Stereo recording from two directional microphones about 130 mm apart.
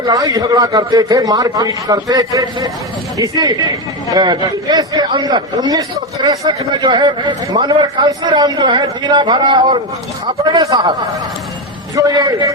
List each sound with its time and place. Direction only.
0.0 s a man's voice: 25° right (ahead or behind)
11.9 s a man's voice: 25° right (ahead or behind)